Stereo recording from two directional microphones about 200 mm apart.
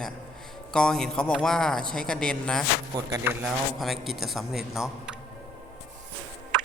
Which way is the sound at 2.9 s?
15° right (ahead or behind).